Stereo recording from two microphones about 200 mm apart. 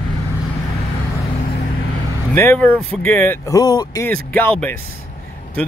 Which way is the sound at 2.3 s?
10° left (ahead or behind).